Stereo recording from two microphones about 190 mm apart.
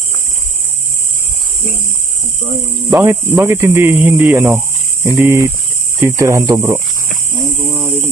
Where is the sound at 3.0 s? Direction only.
10° right (ahead or behind).